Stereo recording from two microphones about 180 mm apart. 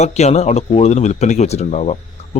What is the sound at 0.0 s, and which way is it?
Speech, 40° left (ahead or behind).